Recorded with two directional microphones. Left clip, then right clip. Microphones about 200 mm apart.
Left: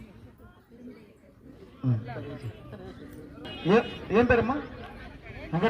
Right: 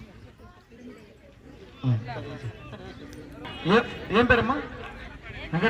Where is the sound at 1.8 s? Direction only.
55° left (ahead or behind).